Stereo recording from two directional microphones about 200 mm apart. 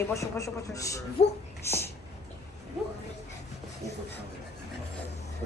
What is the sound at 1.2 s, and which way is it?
Speech, 30° left (ahead or behind).